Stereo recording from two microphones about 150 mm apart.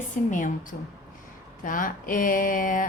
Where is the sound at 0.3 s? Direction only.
60° left (ahead or behind).